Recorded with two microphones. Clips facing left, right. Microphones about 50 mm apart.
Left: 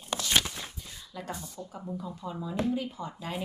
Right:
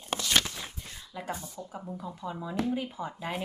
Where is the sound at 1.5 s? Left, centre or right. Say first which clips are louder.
Left 1 dB; centre.